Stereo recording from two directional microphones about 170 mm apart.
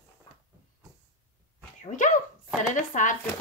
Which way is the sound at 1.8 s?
45° left (ahead or behind).